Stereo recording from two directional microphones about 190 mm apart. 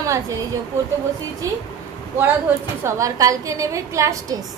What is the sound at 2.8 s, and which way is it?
A woman's voice, 15° right (ahead or behind).